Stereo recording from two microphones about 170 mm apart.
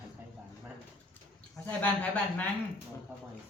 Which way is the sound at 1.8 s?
10° left (ahead or behind).